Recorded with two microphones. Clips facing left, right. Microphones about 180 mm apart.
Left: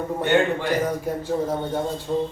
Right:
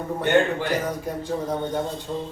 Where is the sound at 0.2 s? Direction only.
10° left (ahead or behind).